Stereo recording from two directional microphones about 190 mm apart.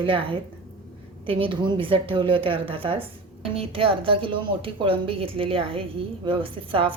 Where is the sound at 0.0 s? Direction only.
25° right (ahead or behind).